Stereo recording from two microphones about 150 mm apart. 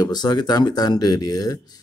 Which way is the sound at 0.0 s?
25° left (ahead or behind).